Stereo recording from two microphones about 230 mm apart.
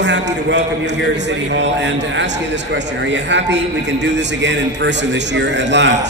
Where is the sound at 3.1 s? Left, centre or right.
Right.